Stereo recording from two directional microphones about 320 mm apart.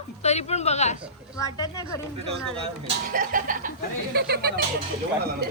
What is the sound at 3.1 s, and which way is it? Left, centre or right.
Speech, right.